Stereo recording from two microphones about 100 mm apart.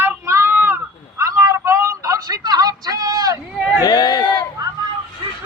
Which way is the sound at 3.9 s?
45° left (ahead or behind).